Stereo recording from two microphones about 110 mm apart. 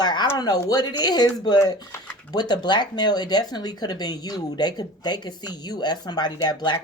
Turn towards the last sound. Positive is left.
turn(degrees=45)  # may be behind; listen again after turning